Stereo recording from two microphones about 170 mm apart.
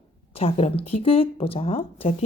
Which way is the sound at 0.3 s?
35° left (ahead or behind).